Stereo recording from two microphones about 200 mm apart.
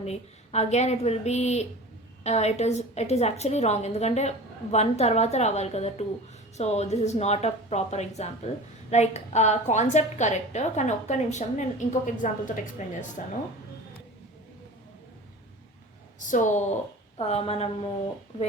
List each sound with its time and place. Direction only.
0.0 s a woman's voice: 35° left (ahead or behind)
16.1 s a woman's voice: 40° left (ahead or behind)